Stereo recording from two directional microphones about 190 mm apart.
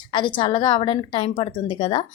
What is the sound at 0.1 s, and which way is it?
A woman's voice, 25° left (ahead or behind).